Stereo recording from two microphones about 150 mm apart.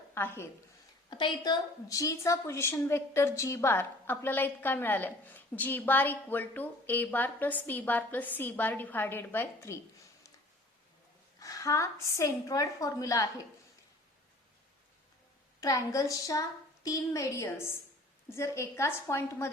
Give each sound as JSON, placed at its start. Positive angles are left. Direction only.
{"t": 0.1, "sound": "a woman's voice", "side_deg": 15}
{"t": 1.1, "sound": "a woman's voice", "side_deg": 30}
{"t": 11.3, "sound": "a woman's voice", "side_deg": 20}
{"t": 15.6, "sound": "a woman's voice", "side_deg": 25}